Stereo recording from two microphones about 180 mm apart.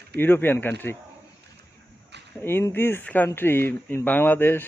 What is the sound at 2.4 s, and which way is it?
Speech, 10° left (ahead or behind).